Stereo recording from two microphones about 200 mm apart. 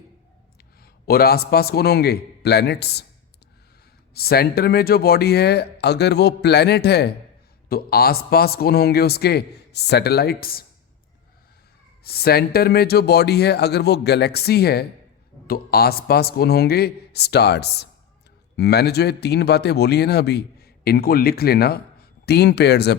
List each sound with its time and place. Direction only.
0.8 s a man's voice: 50° left (ahead or behind)
4.1 s a man's voice: 50° left (ahead or behind)
12.0 s a man's voice: 50° left (ahead or behind)